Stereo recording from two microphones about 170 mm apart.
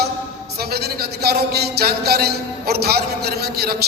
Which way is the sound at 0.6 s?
70° right (ahead or behind).